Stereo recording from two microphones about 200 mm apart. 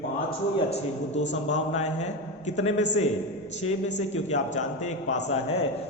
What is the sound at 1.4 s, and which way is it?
A man's voice, 35° left (ahead or behind).